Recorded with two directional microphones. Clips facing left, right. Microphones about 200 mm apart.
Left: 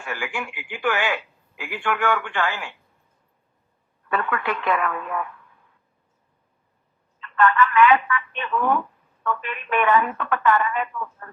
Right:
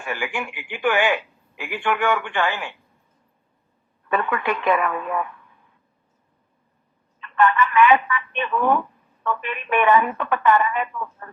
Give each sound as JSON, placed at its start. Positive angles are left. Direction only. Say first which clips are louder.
{"t": 0.1, "sound": "a man's voice", "louder": "right 2 dB", "side_deg": -20}
{"t": 4.1, "sound": "a man's voice", "louder": "right 2 dB", "side_deg": -20}
{"t": 7.2, "sound": "telephone", "louder": "even", "side_deg": -15}
{"t": 8.4, "sound": "a man's voice", "louder": "right 3 dB", "side_deg": -20}